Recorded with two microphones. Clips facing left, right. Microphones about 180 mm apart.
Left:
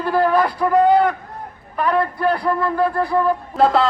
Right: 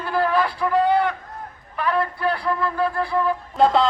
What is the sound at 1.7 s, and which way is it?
A man's voice, 45° left (ahead or behind).